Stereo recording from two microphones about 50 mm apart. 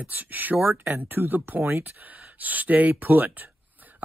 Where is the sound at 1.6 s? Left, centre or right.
Right.